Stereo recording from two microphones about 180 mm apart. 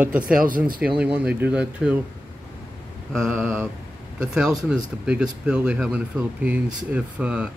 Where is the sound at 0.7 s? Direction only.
5° right (ahead or behind).